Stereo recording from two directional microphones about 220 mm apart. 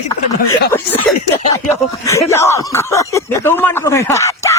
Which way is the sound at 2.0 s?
15° left (ahead or behind).